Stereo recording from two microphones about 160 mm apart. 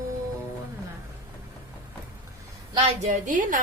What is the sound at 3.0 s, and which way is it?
Speech, 50° right (ahead or behind).